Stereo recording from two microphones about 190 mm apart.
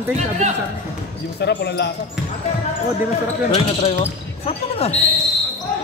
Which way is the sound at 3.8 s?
35° left (ahead or behind).